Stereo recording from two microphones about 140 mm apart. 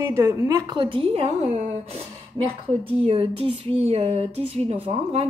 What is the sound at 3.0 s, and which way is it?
A woman's voice, 40° right (ahead or behind).